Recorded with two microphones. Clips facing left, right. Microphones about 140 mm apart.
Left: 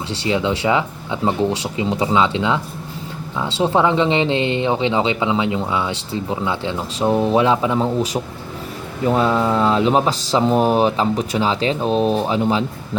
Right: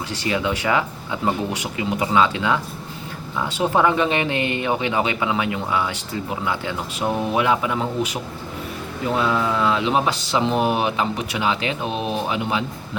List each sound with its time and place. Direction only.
0.3 s speech: 25° left (ahead or behind)